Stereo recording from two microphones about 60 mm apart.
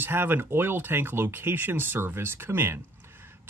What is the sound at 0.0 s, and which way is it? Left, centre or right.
Speech, right.